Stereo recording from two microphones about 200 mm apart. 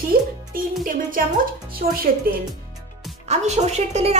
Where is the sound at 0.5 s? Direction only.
45° right (ahead or behind).